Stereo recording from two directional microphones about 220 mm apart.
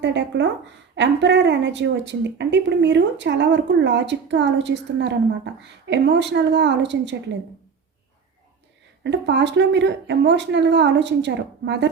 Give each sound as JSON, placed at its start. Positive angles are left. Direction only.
{"t": 0.0, "sound": "a woman's voice", "side_deg": -50}
{"t": 9.0, "sound": "a woman's voice", "side_deg": -55}